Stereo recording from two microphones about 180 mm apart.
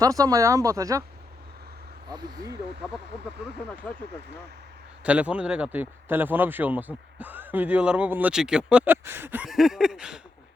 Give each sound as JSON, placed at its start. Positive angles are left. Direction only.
{"t": 0.0, "sound": "speech", "side_deg": -20}
{"t": 2.0, "sound": "speech", "side_deg": -25}
{"t": 3.6, "sound": "speech", "side_deg": 10}
{"t": 5.0, "sound": "speech", "side_deg": -5}